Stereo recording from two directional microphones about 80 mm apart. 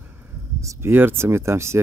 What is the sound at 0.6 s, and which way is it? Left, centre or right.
Speech, right.